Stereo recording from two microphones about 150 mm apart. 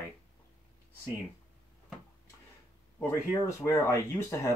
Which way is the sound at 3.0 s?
20° left (ahead or behind).